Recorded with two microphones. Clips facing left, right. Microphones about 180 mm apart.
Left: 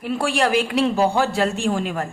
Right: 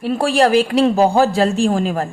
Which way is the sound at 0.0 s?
35° right (ahead or behind).